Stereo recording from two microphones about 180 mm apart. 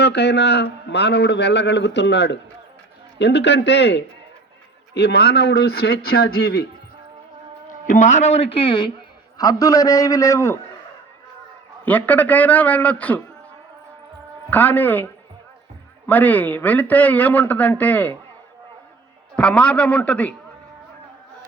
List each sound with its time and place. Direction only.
0.0 s a man's voice: 70° left (ahead or behind)
7.9 s a man's voice: 40° left (ahead or behind); by 10.6 s 15° left (ahead or behind)
11.9 s speech: 10° left (ahead or behind)
14.5 s speech: 10° left (ahead or behind)
19.4 s speech: 5° left (ahead or behind)